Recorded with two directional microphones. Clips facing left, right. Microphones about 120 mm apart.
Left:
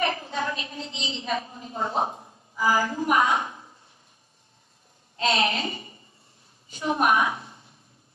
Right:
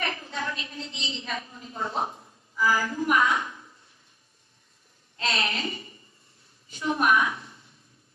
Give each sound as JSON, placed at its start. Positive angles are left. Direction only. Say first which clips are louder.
{"t": 0.0, "sound": "a woman's voice", "louder": "left 5 dB", "side_deg": 25}
{"t": 5.1, "sound": "a woman's voice", "louder": "left 5 dB", "side_deg": 20}